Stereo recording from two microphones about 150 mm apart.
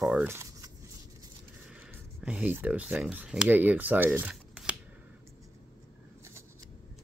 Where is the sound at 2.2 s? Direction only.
10° right (ahead or behind).